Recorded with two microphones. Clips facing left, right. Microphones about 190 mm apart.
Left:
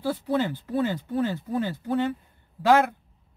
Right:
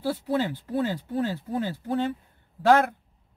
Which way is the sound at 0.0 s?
5° right (ahead or behind).